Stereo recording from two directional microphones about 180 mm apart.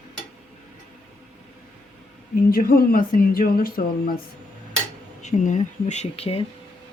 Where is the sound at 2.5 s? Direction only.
55° left (ahead or behind).